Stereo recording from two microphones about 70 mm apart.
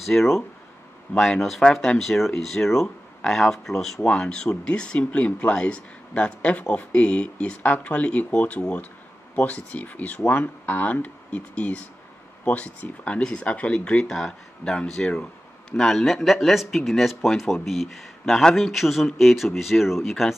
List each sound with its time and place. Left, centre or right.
0.0 s speech: centre